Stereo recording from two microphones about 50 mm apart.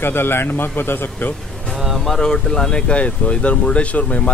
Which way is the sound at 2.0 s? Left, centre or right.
Centre.